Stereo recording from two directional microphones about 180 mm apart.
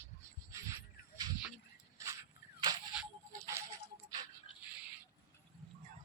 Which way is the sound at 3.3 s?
20° right (ahead or behind).